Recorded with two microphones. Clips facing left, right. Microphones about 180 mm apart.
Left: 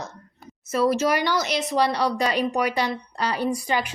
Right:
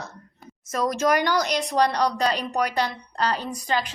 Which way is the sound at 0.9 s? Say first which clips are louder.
Right 1 dB; 50° right (ahead or behind).